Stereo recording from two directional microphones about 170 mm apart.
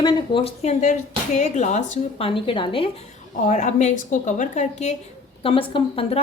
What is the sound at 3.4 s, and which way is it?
A woman's voice, 45° left (ahead or behind).